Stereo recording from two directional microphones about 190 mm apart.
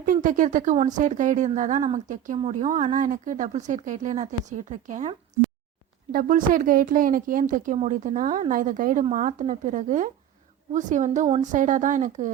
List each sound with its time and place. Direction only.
0.0 s a woman's voice: 45° right (ahead or behind)